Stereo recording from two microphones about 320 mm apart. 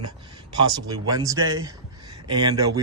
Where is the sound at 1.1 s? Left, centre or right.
Centre.